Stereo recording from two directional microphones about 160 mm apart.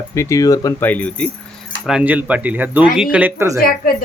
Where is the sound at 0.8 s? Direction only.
10° left (ahead or behind).